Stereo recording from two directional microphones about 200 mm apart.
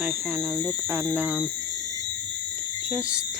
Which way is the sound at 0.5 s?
10° right (ahead or behind).